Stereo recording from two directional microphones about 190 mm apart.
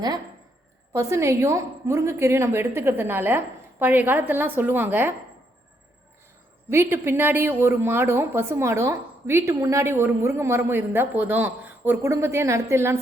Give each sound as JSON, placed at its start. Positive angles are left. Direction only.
{"t": 0.9, "sound": "speech", "side_deg": -15}
{"t": 6.7, "sound": "speech", "side_deg": -15}